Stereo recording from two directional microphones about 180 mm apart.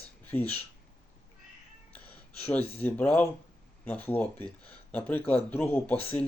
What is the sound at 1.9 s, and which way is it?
Gasp, 10° left (ahead or behind).